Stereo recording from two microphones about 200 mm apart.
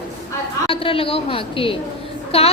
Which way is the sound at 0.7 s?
25° left (ahead or behind).